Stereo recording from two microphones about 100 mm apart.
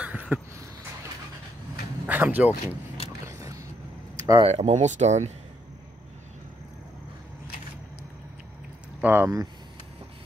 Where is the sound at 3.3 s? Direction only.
30° right (ahead or behind).